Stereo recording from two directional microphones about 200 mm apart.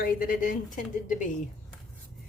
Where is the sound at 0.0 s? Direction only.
45° left (ahead or behind).